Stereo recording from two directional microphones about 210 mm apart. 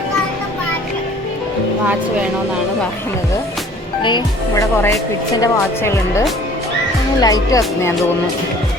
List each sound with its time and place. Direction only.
4.0 s speech: 20° left (ahead or behind)